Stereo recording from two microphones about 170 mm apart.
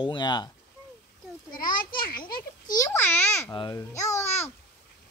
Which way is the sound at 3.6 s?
20° left (ahead or behind).